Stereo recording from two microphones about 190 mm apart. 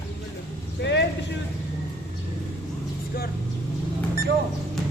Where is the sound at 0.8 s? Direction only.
65° left (ahead or behind).